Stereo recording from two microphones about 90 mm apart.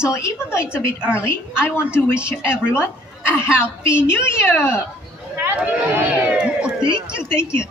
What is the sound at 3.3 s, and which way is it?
A woman's voice, 25° left (ahead or behind).